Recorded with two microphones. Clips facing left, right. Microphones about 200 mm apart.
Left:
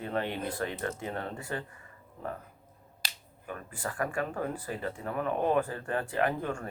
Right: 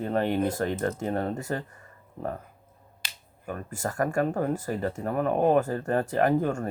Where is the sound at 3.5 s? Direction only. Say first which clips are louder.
Right 5 dB; 45° right (ahead or behind).